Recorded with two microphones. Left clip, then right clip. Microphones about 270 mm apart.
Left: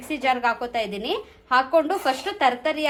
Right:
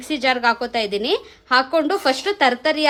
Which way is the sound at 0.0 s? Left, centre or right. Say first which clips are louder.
Right 4 dB; right.